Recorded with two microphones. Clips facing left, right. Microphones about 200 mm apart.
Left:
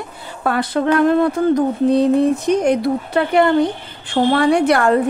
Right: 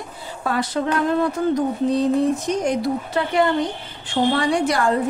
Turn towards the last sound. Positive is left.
turn(degrees=60)  # may be behind; listen again after turning